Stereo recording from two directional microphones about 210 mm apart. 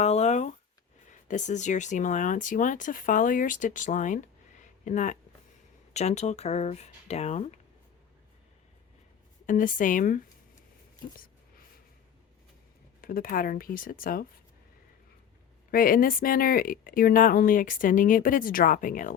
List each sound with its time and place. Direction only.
0.0 s a sound: 30° left (ahead or behind)
1.1 s speech: 35° left (ahead or behind)
9.5 s speech: 40° left (ahead or behind)
13.0 s speech: 45° left (ahead or behind)
15.7 s speech: 40° left (ahead or behind)